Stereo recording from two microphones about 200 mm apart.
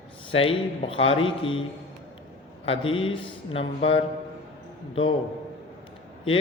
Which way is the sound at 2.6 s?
25° left (ahead or behind).